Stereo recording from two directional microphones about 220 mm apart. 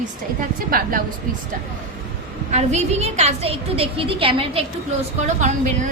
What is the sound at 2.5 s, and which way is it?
A woman's voice, 30° right (ahead or behind).